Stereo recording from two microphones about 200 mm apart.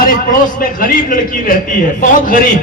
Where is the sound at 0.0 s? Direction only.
45° left (ahead or behind).